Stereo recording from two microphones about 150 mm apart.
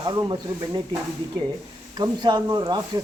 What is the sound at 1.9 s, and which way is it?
Speech, 30° right (ahead or behind).